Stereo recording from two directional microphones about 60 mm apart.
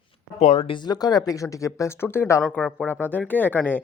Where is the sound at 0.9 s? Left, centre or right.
Left.